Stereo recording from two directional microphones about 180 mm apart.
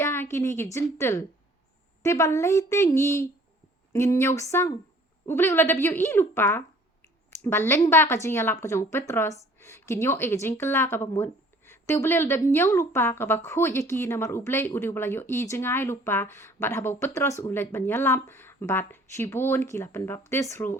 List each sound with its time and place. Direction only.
0.0 s a woman's voice: 15° left (ahead or behind)